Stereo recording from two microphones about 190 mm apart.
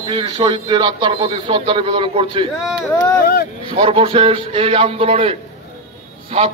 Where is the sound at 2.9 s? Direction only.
15° left (ahead or behind).